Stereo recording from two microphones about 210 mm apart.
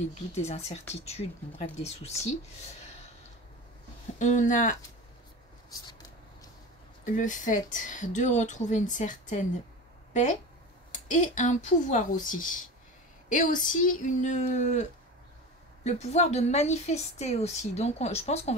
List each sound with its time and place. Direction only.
0.5 s a woman's voice: 30° left (ahead or behind)
4.2 s a woman's voice: 35° left (ahead or behind)
7.1 s a woman's voice: 35° left (ahead or behind)
10.9 s a woman's voice: 35° left (ahead or behind)